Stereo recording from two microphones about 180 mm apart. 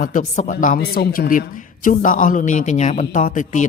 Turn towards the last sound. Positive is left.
turn(degrees=45)  # may be behind; listen again after turning